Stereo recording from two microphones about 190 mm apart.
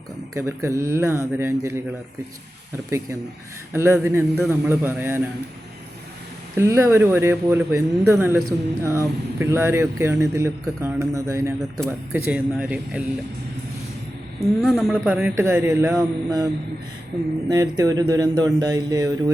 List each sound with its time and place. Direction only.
0.3 s speech: 15° right (ahead or behind)
3.7 s speech: 15° right (ahead or behind)
6.6 s speech: 15° right (ahead or behind)
14.3 s speech: centre (ahead or behind); by 16.5 s 20° right (ahead or behind)
17.5 s speech: 20° right (ahead or behind)